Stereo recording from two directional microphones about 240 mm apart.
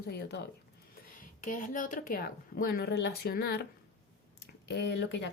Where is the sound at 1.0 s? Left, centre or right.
Left.